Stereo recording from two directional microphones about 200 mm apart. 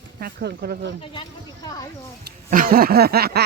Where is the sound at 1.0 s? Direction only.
25° left (ahead or behind).